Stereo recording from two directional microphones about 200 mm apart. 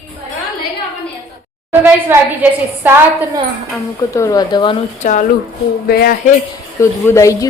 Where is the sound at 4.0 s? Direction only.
15° left (ahead or behind).